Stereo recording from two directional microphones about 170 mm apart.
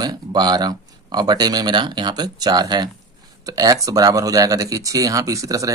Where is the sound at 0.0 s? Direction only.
25° right (ahead or behind).